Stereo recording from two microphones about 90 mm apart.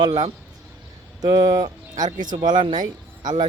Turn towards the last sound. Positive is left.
turn(degrees=-50)  # may be behind; listen again after turning